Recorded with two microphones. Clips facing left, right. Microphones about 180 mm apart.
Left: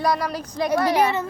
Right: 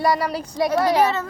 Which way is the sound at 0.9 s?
10° left (ahead or behind).